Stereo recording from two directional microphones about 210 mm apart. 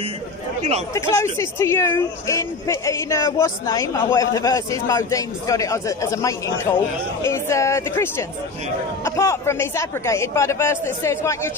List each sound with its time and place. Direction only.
0.6 s speech: 30° right (ahead or behind)
0.9 s speech: 15° left (ahead or behind)